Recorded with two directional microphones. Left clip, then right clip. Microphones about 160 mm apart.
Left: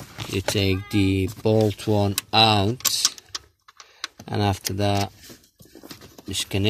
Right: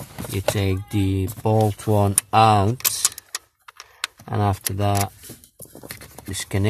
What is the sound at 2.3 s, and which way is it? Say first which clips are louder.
Speech: right 2 dB; 5° right (ahead or behind).